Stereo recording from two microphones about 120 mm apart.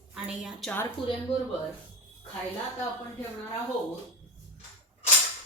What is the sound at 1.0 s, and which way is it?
Speech, 45° left (ahead or behind).